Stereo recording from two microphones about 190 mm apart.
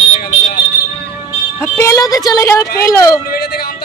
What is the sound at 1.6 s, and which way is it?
Speech, 15° left (ahead or behind).